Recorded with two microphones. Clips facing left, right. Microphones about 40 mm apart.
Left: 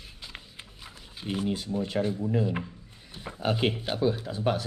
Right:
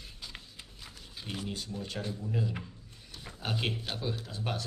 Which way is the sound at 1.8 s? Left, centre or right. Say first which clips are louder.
Left 11 dB; left.